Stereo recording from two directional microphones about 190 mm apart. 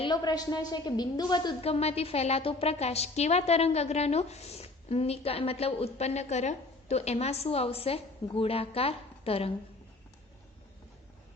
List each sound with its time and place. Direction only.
0.0 s a woman's voice: 20° left (ahead or behind)